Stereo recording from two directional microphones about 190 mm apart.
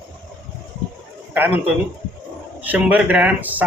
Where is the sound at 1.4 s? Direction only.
10° right (ahead or behind).